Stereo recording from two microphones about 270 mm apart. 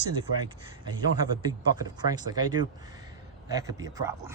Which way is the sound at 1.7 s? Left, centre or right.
Centre.